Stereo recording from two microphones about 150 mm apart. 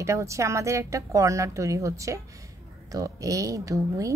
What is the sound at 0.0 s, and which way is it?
A woman's voice, 20° right (ahead or behind).